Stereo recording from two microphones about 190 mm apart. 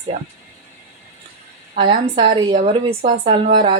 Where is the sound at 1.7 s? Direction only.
35° right (ahead or behind).